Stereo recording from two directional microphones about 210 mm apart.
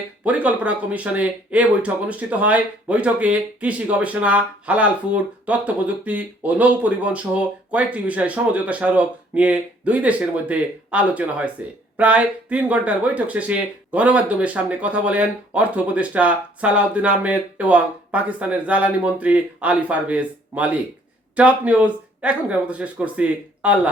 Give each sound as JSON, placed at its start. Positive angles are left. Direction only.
{"t": 0.3, "sound": "speech", "side_deg": -5}